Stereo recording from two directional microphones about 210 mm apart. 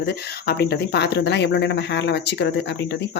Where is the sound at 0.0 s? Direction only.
50° left (ahead or behind).